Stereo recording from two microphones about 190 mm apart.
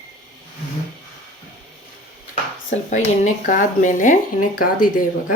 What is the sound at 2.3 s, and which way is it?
Speech, 35° left (ahead or behind).